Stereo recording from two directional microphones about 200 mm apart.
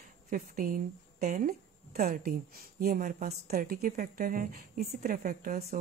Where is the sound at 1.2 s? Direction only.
40° right (ahead or behind).